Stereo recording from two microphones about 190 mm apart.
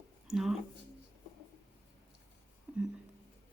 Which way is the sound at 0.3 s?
Centre (ahead or behind).